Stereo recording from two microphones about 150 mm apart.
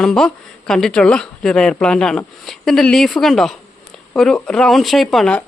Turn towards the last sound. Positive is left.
turn(degrees=5)  # may be behind; listen again after turning